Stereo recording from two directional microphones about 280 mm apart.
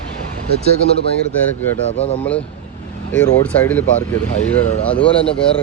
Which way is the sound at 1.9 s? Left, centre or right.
Left.